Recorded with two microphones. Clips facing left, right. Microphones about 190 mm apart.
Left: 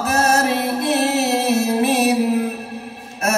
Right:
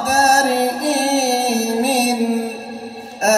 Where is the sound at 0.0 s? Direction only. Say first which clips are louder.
Right 2 dB; 40° right (ahead or behind).